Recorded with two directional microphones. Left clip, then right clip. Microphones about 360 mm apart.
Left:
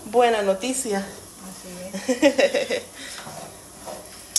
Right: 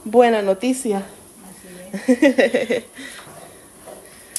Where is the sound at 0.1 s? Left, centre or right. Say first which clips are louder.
Right 4 dB; centre.